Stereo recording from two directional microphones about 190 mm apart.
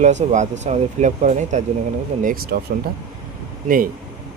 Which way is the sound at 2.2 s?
55° right (ahead or behind).